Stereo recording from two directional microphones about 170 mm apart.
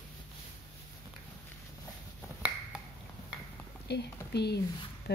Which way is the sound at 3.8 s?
80° left.